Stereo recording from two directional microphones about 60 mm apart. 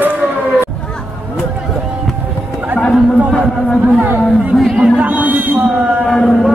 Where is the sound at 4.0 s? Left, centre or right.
Right.